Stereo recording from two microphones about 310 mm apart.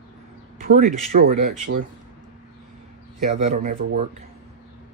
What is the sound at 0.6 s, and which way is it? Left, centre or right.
Speech, right.